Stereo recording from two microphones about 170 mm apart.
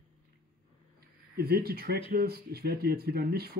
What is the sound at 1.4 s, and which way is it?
Speech, 65° right (ahead or behind).